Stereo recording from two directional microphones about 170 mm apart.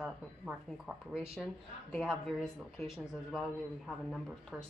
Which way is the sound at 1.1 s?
5° right (ahead or behind).